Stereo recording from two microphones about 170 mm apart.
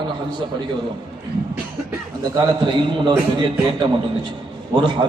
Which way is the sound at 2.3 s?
25° right (ahead or behind).